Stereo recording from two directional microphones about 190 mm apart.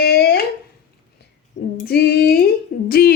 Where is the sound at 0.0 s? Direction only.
55° left (ahead or behind).